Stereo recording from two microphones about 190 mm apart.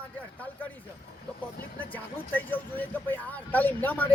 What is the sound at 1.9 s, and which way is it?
A man's voice, 10° left (ahead or behind).